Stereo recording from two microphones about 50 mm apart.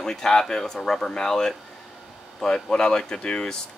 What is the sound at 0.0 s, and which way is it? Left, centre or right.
Speech, centre.